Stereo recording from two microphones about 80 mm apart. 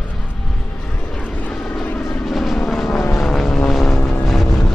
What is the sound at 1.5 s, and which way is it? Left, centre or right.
Vehicle, centre.